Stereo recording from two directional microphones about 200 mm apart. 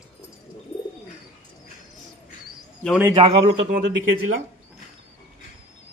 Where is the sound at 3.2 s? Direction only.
30° right (ahead or behind).